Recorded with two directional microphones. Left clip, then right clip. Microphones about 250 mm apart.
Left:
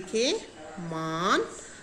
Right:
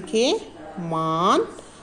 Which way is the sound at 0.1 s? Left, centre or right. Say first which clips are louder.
Right 6 dB; centre.